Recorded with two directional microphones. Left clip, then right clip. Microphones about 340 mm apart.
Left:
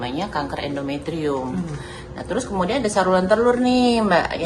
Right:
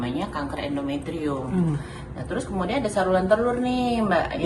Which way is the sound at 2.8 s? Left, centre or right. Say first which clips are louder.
Left 3 dB; left.